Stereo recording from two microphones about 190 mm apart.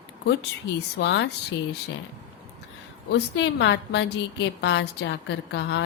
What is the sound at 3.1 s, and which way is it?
A woman's voice, 70° left (ahead or behind).